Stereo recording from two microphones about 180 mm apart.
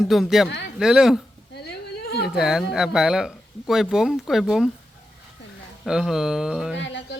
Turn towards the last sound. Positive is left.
turn(degrees=80)